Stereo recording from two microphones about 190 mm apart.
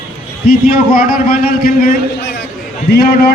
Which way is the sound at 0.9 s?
50° left (ahead or behind).